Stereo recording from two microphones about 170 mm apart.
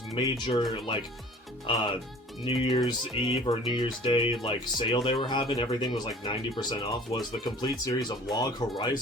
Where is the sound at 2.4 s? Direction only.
30° left (ahead or behind).